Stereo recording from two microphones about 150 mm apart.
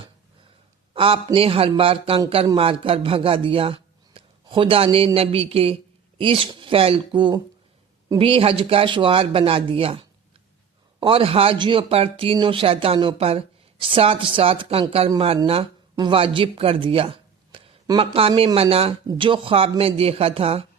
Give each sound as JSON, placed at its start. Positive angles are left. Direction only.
{"t": 0.9, "sound": "speech", "side_deg": -40}